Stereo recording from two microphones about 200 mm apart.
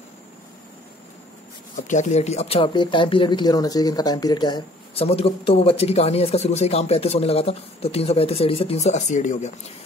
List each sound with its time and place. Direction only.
1.8 s speech: 35° left (ahead or behind)